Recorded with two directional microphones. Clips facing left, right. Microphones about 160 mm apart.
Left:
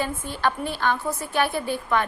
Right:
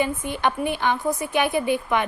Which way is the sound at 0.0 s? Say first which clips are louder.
Right 2 dB; 15° right (ahead or behind).